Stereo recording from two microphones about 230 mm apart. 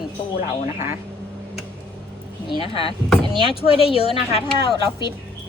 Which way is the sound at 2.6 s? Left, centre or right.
Left.